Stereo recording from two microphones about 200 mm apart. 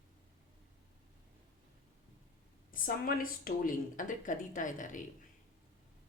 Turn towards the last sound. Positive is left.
turn(degrees=40)  # may be behind; listen again after turning